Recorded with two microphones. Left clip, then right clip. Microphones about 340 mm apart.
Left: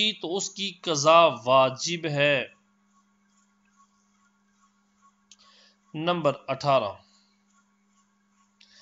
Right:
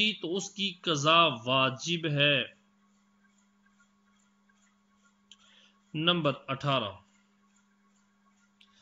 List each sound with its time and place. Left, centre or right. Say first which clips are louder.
0.2 s speech: left 3 dB; centre
5.9 s speech: left 3 dB; centre